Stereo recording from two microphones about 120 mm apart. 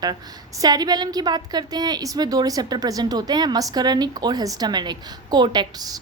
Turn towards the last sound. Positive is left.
turn(degrees=-35)  # may be behind; listen again after turning